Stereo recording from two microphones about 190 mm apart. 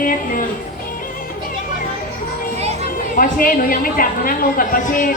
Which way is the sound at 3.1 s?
50° left (ahead or behind).